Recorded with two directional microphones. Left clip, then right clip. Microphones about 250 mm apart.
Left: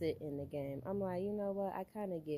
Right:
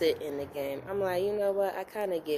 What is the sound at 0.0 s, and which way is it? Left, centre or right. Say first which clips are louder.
Speech: right 11 dB; left.